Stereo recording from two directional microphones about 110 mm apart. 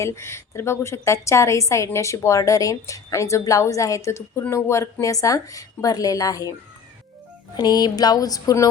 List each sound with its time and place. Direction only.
0.0 s a woman's voice: 25° left (ahead or behind)
7.5 s speech: 40° left (ahead or behind)